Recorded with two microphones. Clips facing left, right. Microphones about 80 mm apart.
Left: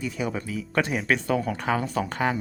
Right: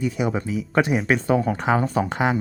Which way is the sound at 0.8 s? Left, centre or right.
Centre.